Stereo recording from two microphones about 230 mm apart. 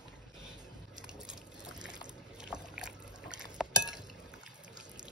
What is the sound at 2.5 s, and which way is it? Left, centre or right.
Liquid, centre.